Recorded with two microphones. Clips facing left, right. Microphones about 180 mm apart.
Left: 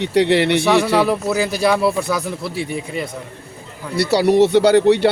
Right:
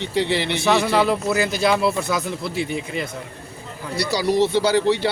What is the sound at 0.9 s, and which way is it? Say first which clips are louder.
Speech: left 2 dB; 5° left (ahead or behind).